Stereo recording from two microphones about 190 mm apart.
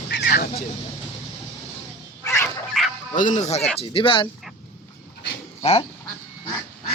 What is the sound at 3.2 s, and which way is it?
Speech, 40° left (ahead or behind).